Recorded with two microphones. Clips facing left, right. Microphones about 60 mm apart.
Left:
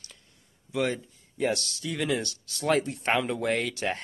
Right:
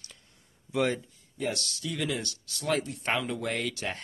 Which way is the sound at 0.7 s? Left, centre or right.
Centre.